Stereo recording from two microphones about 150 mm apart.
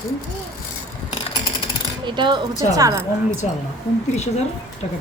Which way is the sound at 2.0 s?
30° right (ahead or behind).